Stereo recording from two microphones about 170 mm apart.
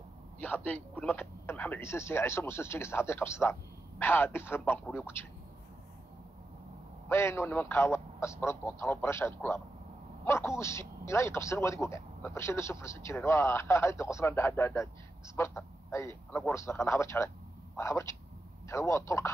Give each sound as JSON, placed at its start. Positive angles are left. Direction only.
{"t": 0.4, "sound": "speech", "side_deg": 10}
{"t": 7.1, "sound": "speech", "side_deg": 15}